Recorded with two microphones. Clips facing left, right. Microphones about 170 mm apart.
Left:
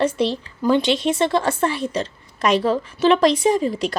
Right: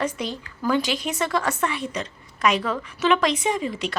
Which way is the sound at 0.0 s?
30° left (ahead or behind).